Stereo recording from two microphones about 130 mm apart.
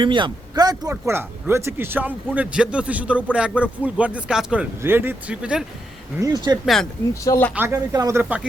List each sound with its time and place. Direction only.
0.0 s speech: 40° right (ahead or behind); by 5.6 s 5° right (ahead or behind)
6.1 s speech: 30° right (ahead or behind)
7.1 s speech: 25° left (ahead or behind)
7.5 s speech: 20° right (ahead or behind)